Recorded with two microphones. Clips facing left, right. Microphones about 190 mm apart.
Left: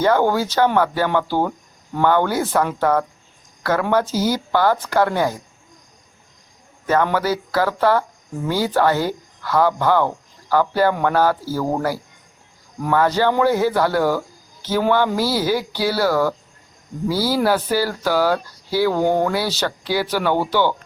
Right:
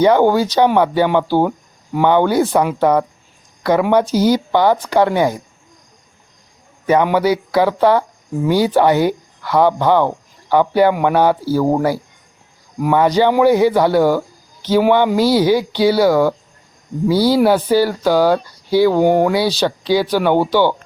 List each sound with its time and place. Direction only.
0.0 s speech: 15° right (ahead or behind)
6.8 s speech: 15° right (ahead or behind)